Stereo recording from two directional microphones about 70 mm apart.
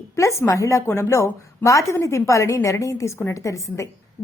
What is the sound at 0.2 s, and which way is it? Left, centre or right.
A woman's voice, left.